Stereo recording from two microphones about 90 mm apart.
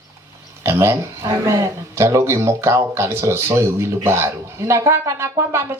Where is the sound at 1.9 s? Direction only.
30° right (ahead or behind).